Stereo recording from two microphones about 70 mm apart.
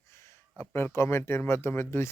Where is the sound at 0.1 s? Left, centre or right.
Left.